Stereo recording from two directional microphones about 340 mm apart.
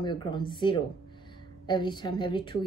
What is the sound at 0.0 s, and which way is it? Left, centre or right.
A woman's voice, centre.